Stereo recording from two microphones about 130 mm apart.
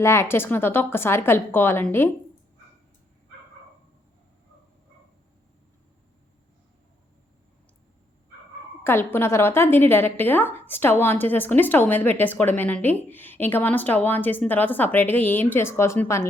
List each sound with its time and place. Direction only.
0.0 s a woman's voice: 20° left (ahead or behind)
8.8 s a woman's voice: 15° left (ahead or behind)